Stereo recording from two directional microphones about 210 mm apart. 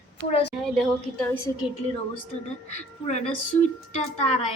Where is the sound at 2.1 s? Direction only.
35° left (ahead or behind).